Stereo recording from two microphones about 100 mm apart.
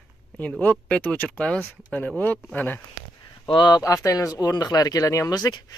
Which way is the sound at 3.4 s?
50° left (ahead or behind).